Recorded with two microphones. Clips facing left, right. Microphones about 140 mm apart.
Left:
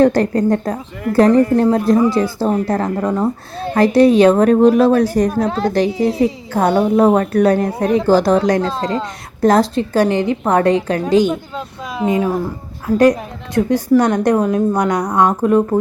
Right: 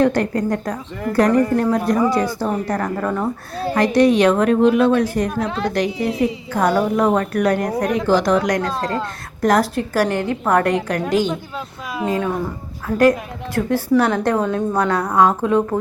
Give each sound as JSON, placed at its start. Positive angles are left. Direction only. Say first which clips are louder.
{"t": 0.0, "sound": "a woman's voice", "louder": "left 4 dB", "side_deg": 35}
{"t": 3.8, "sound": "a woman's voice", "louder": "left 4 dB", "side_deg": 30}